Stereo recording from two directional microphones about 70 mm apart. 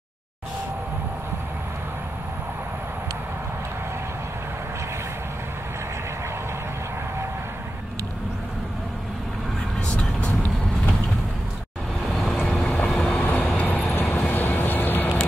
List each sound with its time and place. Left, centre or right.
9.8 s vehicle: centre
12.1 s vehicle: centre
12.8 s vehicle: centre